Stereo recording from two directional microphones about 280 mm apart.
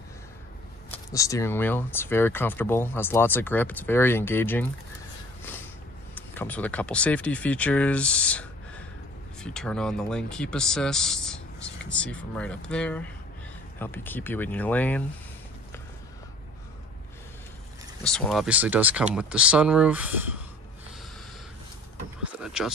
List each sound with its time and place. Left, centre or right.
0.9 s speech: centre
6.1 s speech: centre
18.0 s speech: centre
22.4 s a sound: centre